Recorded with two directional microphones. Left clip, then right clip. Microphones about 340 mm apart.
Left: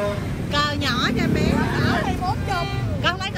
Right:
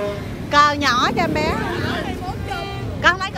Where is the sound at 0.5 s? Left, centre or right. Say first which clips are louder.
Right 8 dB; centre.